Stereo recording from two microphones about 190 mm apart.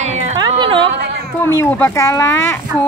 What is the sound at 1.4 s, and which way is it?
Speech, 15° left (ahead or behind).